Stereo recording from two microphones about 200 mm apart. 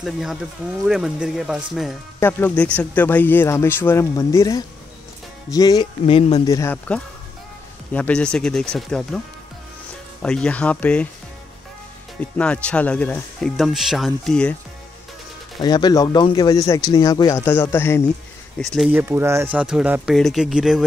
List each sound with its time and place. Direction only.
0.0 s speech: centre (ahead or behind)
2.1 s speech: 10° left (ahead or behind); by 6.4 s 30° left (ahead or behind)
6.4 s speech: 15° left (ahead or behind)
10.2 s speech: 5° left (ahead or behind)
12.2 s speech: 5° left (ahead or behind)
15.6 s speech: 20° left (ahead or behind)
18.6 s speech: centre (ahead or behind)